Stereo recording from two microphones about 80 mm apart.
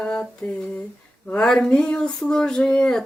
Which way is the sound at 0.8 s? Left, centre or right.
Centre.